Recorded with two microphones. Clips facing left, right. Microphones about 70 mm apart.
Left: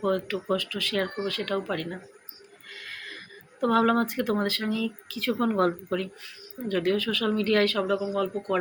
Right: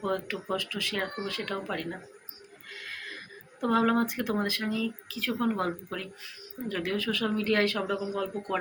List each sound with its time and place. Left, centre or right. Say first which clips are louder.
0.0 s speech: left 4 dB; centre